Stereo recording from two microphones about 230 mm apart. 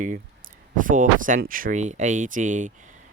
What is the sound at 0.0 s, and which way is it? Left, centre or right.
Speech, right.